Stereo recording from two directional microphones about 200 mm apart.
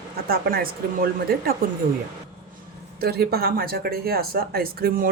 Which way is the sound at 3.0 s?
50° right (ahead or behind).